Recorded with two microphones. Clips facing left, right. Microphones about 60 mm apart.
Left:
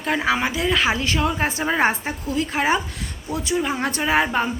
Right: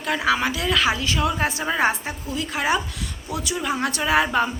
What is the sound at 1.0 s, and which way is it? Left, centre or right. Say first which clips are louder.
Speech: left 1 dB; left.